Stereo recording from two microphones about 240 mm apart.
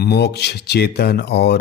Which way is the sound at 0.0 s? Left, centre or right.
Left.